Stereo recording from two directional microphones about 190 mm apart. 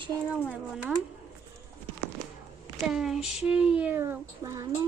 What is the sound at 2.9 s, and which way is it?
Speech, centre (ahead or behind).